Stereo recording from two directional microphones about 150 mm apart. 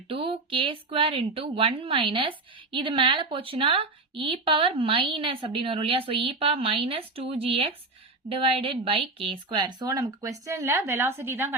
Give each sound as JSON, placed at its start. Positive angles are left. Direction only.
{"t": 0.1, "sound": "a woman's voice", "side_deg": -35}